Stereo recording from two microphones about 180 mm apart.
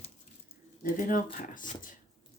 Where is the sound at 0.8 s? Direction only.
50° left (ahead or behind).